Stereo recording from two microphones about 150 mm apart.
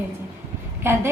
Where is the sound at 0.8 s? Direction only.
15° right (ahead or behind).